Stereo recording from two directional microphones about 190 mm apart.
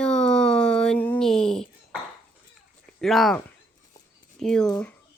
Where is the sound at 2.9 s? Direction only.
Centre (ahead or behind).